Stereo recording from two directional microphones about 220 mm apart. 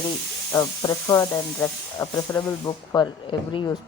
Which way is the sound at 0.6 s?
15° left (ahead or behind).